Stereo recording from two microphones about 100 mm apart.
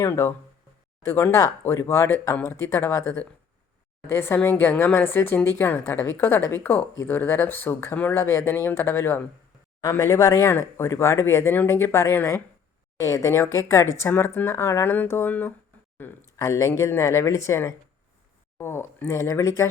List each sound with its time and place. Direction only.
0.0 s a woman's voice: 25° left (ahead or behind)